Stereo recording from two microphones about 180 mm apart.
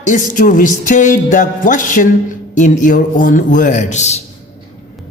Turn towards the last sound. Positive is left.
turn(degrees=40)  # may be behind; listen again after turning